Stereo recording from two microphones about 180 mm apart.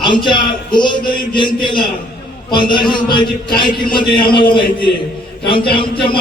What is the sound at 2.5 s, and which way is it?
A man's voice, 25° left (ahead or behind).